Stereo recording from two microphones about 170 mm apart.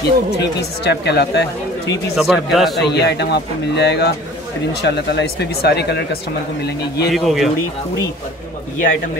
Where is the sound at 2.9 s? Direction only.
80° left.